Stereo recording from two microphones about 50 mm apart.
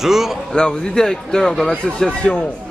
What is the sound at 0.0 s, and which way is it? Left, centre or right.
Speech, centre.